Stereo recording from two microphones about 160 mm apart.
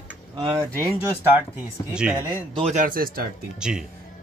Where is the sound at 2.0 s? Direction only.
5° right (ahead or behind).